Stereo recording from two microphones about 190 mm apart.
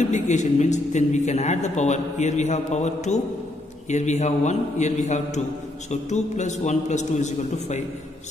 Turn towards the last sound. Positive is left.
turn(degrees=35)  # may be behind; listen again after turning